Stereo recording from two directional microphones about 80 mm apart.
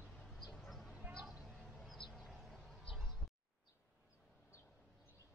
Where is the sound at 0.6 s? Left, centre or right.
Centre.